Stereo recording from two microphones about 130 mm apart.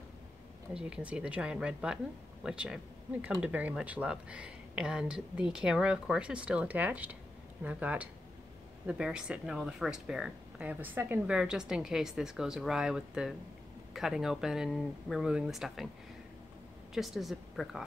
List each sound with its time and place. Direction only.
0.7 s speech: 10° right (ahead or behind)
16.9 s speech: centre (ahead or behind)